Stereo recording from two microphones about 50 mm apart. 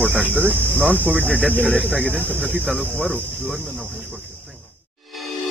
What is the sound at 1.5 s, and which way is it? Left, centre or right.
Speech, left.